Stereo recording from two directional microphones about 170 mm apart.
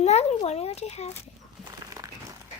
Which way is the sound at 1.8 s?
20° right (ahead or behind).